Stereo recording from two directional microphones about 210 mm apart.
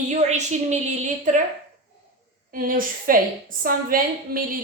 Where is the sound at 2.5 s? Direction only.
40° right (ahead or behind).